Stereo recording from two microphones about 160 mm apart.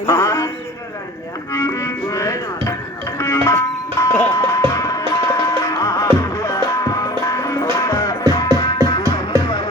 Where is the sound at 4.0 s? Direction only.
15° left (ahead or behind).